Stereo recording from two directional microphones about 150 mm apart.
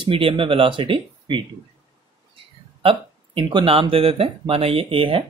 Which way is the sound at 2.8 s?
35° right (ahead or behind).